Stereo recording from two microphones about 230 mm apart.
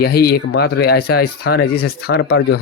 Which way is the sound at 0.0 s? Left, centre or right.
Left.